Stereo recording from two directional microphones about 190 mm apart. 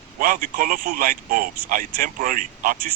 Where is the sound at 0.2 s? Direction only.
45° right (ahead or behind).